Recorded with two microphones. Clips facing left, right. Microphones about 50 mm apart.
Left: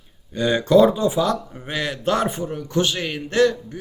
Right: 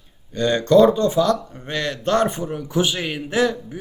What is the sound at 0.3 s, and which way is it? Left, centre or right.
Speech, centre.